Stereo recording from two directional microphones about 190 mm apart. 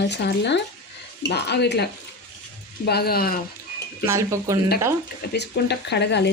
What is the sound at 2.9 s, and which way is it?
Speech, 55° left (ahead or behind).